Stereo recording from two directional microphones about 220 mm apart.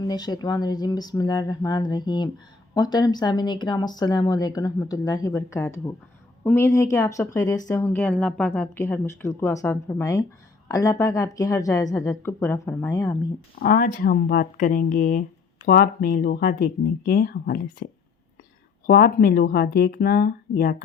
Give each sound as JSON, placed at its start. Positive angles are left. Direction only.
{"t": 0.0, "sound": "speech", "side_deg": 20}
{"t": 13.6, "sound": "speech", "side_deg": 40}
{"t": 18.9, "sound": "speech", "side_deg": 45}